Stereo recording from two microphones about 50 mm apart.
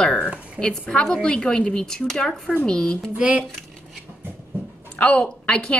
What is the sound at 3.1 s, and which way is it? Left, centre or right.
Speech, right.